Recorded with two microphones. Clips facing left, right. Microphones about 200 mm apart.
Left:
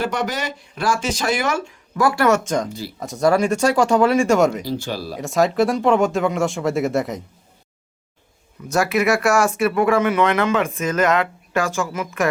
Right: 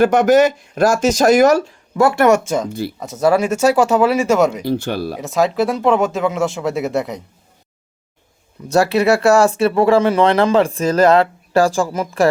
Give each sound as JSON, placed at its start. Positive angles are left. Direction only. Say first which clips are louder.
{"t": 0.0, "sound": "speech", "louder": "right 12 dB", "side_deg": -50}
{"t": 2.0, "sound": "speech", "louder": "right 4 dB", "side_deg": -25}
{"t": 2.4, "sound": "speech", "louder": "right 3 dB", "side_deg": -10}
{"t": 4.6, "sound": "speech", "louder": "right 6 dB", "side_deg": -60}
{"t": 5.2, "sound": "speech", "louder": "even", "side_deg": 0}
{"t": 8.7, "sound": "speech", "louder": "right 4 dB", "side_deg": -30}